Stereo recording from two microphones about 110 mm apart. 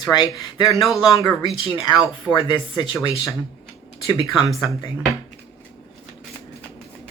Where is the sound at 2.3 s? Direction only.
45° left (ahead or behind).